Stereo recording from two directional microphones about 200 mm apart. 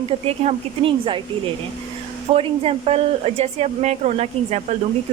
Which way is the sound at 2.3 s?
30° right (ahead or behind).